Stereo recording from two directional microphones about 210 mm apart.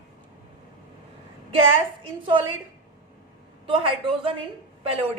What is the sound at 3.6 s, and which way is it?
Speech, 25° right (ahead or behind).